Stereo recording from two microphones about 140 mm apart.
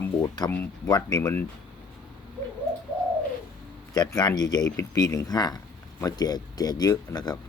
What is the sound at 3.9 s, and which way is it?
Speech, 30° left (ahead or behind).